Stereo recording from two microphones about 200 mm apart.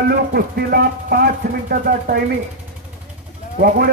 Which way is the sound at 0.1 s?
50° right (ahead or behind).